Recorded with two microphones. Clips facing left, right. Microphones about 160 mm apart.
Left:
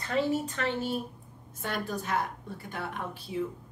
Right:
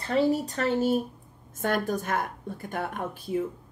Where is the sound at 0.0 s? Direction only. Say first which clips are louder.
Right 4 dB; 35° right (ahead or behind).